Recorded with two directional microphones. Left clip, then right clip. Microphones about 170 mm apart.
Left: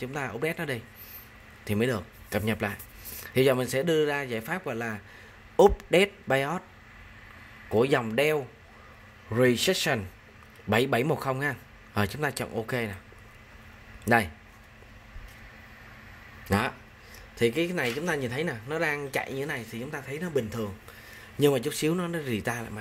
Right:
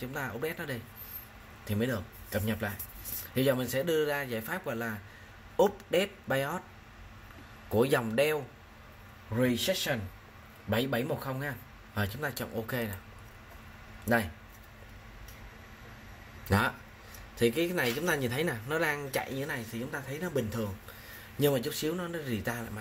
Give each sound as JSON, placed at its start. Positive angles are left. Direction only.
{"t": 0.0, "sound": "speech", "side_deg": 45}
{"t": 7.7, "sound": "speech", "side_deg": 30}
{"t": 9.3, "sound": "a man's voice", "side_deg": 75}
{"t": 10.7, "sound": "a man's voice", "side_deg": 65}
{"t": 14.0, "sound": "a man's voice", "side_deg": 55}
{"t": 16.4, "sound": "speech", "side_deg": 30}
{"t": 21.4, "sound": "speech", "side_deg": 50}